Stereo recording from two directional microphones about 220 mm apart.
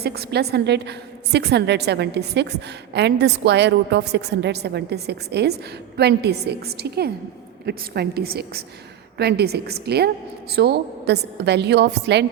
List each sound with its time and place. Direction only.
0.0 s a woman's voice: 45° right (ahead or behind)